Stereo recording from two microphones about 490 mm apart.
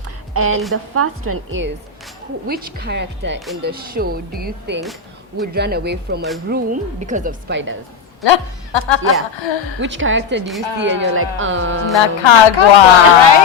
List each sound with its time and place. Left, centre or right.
0.3 s a woman's voice: right
8.2 s a woman's voice: left
9.8 s a woman's voice: right
11.9 s speech: left